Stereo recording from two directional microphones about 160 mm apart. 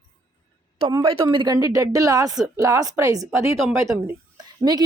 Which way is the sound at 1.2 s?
25° right (ahead or behind).